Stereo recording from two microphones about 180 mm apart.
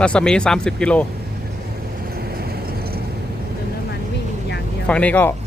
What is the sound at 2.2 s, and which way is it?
Vehicle, 60° right (ahead or behind).